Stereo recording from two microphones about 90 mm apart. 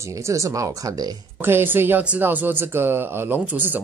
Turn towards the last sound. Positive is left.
turn(degrees=-20)  # may be behind; listen again after turning